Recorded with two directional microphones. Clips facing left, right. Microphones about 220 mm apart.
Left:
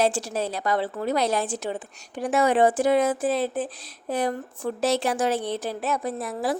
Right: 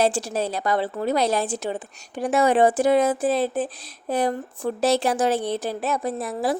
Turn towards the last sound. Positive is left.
turn(degrees=-30)  # may be behind; listen again after turning